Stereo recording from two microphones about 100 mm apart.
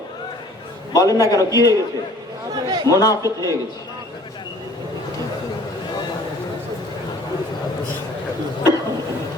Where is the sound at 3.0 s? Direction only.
35° left (ahead or behind).